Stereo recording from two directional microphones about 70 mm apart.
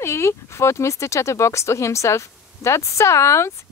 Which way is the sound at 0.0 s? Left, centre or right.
Left.